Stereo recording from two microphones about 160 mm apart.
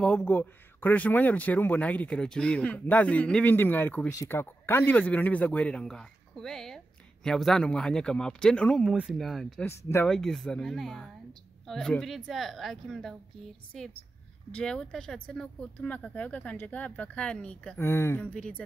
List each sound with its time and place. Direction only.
0.0 s speech: 5° left (ahead or behind)
9.7 s speech: 15° left (ahead or behind)
10.0 s speech: 5° left (ahead or behind)